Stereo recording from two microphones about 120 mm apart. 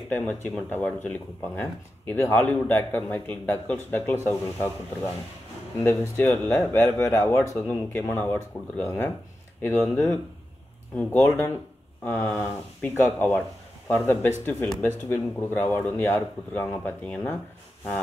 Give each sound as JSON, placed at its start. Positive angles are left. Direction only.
{"t": 0.7, "sound": "a man's voice", "side_deg": 15}